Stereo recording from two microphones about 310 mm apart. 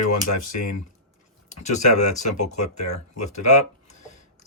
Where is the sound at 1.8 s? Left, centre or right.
Left.